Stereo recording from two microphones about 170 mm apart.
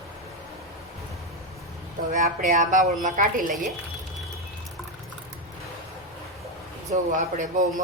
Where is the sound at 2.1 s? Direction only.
50° right (ahead or behind).